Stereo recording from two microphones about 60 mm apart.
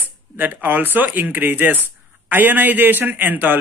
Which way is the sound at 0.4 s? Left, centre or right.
Right.